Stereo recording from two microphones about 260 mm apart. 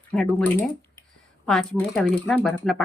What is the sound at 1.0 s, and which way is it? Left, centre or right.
Speech, centre.